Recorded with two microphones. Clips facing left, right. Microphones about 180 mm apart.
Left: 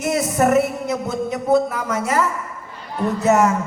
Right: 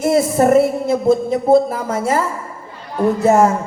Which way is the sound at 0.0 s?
30° right (ahead or behind).